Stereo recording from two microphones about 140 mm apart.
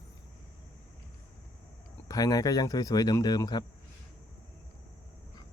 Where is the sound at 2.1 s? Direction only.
25° left (ahead or behind).